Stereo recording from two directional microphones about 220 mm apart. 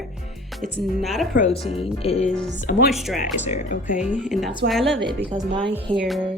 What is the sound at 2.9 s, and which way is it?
Speech, centre (ahead or behind).